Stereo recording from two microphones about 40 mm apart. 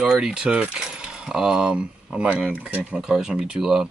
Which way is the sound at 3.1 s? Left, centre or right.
Centre.